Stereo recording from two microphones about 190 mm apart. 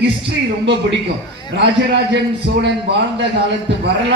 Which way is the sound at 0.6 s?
70° right (ahead or behind).